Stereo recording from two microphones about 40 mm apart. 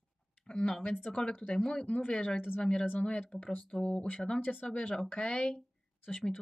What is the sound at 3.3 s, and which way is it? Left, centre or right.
Speech, centre.